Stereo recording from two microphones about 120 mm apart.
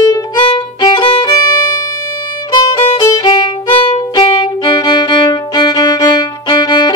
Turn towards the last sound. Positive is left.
turn(degrees=35)  # may be behind; listen again after turning